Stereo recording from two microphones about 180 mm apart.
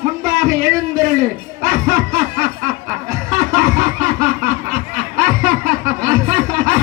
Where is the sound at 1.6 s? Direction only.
45° right (ahead or behind).